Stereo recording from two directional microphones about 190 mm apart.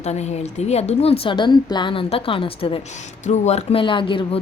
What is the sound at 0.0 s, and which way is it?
A woman's voice, 35° left (ahead or behind).